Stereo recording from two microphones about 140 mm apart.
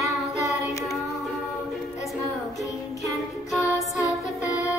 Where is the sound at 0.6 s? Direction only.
25° left (ahead or behind).